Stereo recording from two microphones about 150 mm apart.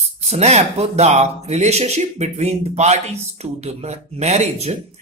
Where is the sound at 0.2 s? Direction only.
45° right (ahead or behind).